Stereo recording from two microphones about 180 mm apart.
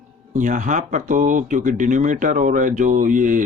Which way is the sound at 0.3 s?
45° right (ahead or behind).